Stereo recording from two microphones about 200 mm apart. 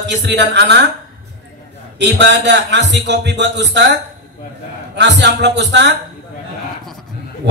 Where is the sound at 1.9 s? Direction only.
60° right (ahead or behind).